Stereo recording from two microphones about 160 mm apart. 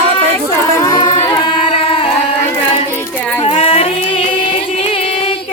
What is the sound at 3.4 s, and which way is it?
Music, 35° left (ahead or behind).